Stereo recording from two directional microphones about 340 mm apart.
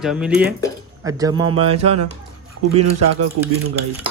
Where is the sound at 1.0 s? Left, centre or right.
Centre.